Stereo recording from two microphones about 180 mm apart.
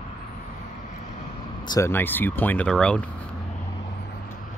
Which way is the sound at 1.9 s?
10° left (ahead or behind).